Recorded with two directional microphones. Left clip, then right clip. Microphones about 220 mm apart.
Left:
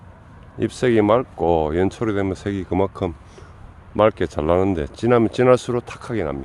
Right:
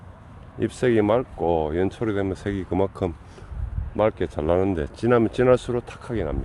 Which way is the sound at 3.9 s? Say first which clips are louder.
Left 5 dB; 25° left (ahead or behind).